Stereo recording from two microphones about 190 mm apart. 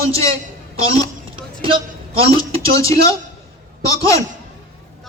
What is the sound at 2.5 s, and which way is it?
Speech, 15° left (ahead or behind).